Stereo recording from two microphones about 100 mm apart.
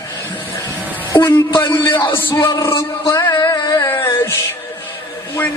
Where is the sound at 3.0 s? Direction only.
30° left (ahead or behind).